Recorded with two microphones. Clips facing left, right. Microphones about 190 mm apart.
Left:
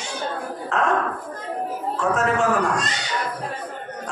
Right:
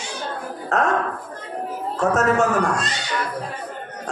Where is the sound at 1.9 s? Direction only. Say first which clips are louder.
Right 3 dB; 40° right (ahead or behind).